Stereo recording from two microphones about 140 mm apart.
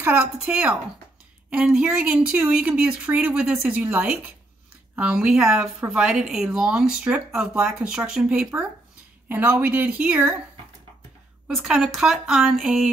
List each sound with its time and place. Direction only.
0.0 s a woman's voice: 10° right (ahead or behind)
11.4 s a woman's voice: 5° right (ahead or behind)